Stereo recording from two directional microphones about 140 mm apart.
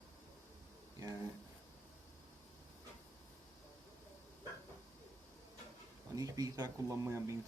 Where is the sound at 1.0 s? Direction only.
25° right (ahead or behind).